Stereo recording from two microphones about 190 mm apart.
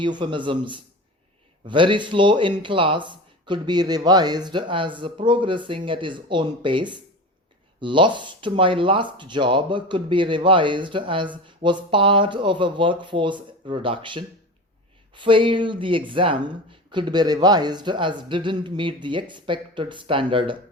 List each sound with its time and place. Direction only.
0.0 s speech: 25° right (ahead or behind)